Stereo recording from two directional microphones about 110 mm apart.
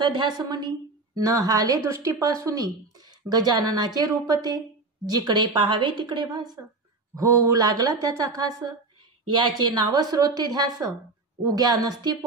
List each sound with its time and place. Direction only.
0.0 s speech: 45° right (ahead or behind)
7.2 s speech: 30° right (ahead or behind)
9.9 s speech: 35° right (ahead or behind)